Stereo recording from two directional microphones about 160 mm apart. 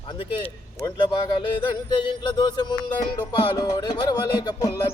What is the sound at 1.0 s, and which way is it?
Music, 25° left (ahead or behind).